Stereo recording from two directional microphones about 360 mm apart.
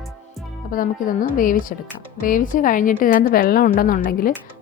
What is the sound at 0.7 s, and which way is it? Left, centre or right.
A woman's voice, left.